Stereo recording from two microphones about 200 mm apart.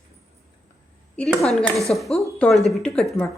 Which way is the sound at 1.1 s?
5° left (ahead or behind).